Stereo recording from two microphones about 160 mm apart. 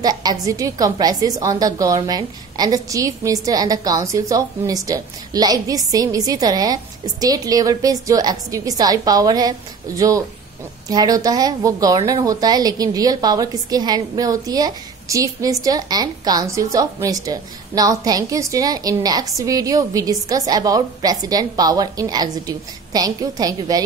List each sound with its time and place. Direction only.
0.0 s a woman's voice: 25° right (ahead or behind)